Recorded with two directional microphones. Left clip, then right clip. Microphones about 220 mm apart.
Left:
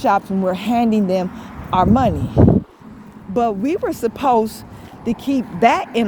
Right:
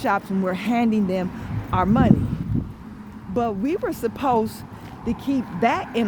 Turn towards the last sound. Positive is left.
turn(degrees=25)  # may be behind; listen again after turning